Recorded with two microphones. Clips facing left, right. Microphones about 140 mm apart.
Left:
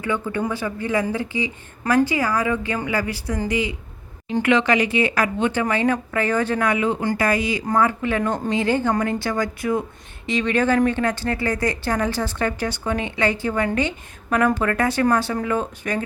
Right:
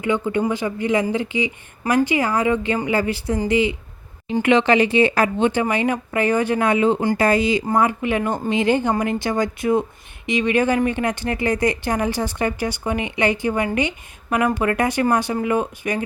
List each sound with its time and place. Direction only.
0.0 s speech: 20° right (ahead or behind)